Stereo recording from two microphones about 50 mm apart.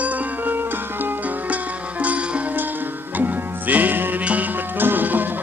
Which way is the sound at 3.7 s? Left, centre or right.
Right.